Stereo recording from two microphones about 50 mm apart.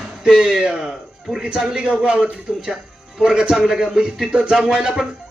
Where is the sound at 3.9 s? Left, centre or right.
Centre.